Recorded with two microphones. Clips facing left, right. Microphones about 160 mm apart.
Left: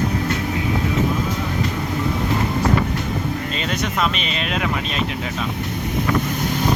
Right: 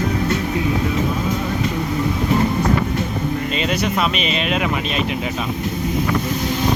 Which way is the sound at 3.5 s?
5° right (ahead or behind).